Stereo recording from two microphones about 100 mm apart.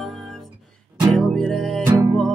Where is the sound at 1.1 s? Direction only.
5° left (ahead or behind).